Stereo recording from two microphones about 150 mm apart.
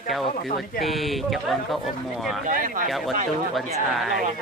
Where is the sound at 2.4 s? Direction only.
65° right (ahead or behind).